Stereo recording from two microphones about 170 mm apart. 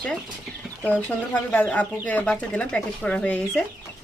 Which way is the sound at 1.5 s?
10° left (ahead or behind).